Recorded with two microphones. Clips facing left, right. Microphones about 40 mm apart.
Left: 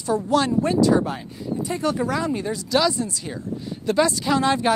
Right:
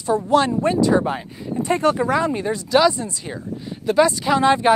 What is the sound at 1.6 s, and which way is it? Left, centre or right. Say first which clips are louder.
Speech: right 7 dB; right.